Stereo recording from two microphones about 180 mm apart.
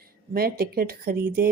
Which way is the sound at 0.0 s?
60° right (ahead or behind).